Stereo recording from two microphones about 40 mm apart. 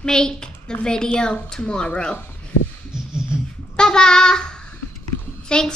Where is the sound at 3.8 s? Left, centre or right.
Centre.